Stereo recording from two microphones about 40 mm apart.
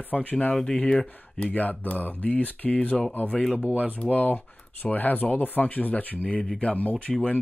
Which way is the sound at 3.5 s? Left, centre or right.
Right.